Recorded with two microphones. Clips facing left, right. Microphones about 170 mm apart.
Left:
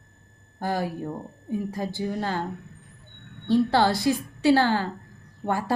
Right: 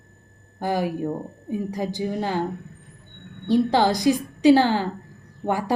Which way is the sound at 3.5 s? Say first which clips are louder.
Right 2 dB; 15° right (ahead or behind).